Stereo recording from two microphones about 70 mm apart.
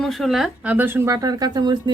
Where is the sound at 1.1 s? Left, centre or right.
Right.